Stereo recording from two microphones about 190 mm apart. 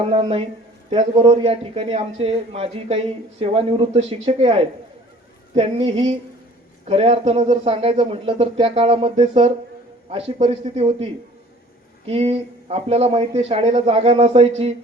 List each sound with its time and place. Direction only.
0.0 s a man's voice: 30° right (ahead or behind)